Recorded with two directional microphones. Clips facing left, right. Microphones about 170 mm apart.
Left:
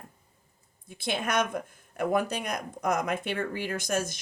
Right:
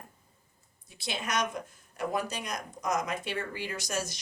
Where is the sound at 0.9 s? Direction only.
55° left (ahead or behind).